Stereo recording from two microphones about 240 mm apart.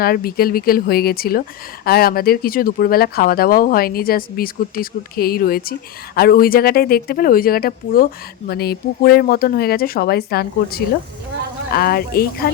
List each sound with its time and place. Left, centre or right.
0.0 s speech: left